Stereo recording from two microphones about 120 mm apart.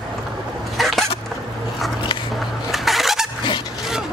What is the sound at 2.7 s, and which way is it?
Vehicle, centre (ahead or behind).